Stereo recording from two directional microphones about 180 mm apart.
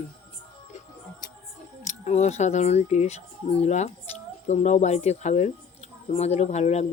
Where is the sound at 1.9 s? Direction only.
40° left (ahead or behind).